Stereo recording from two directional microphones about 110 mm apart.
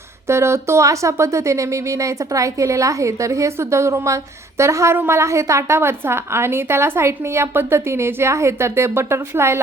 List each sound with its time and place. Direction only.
0.3 s speech: 25° right (ahead or behind)